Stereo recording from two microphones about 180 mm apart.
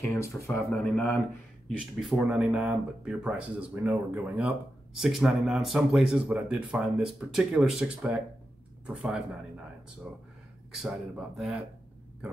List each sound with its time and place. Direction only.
0.1 s speech: 15° left (ahead or behind)
2.0 s speech: centre (ahead or behind)